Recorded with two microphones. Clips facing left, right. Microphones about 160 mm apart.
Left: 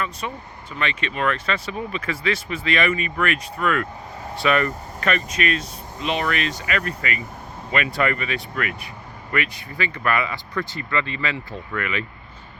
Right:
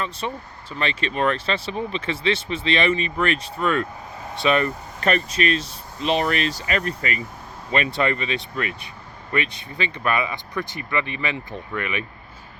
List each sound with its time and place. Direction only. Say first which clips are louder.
0.2 s speech: right 2 dB; 30° right (ahead or behind)
5.0 s speech: right 2 dB; 35° right (ahead or behind)